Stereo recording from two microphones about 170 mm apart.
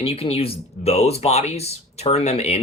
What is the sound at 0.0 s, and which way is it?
Speech, 35° left (ahead or behind).